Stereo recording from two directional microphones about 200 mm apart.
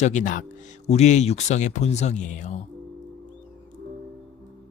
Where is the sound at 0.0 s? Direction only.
40° left (ahead or behind).